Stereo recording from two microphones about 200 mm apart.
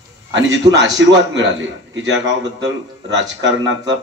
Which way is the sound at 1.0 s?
65° right (ahead or behind).